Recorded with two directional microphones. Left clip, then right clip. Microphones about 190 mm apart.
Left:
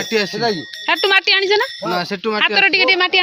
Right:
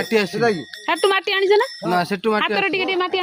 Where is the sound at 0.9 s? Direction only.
15° right (ahead or behind).